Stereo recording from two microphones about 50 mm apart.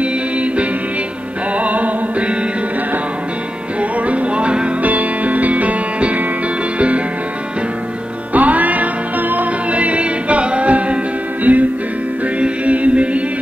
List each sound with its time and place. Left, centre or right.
0.0 s music: right
4.0 s music: right
8.3 s music: right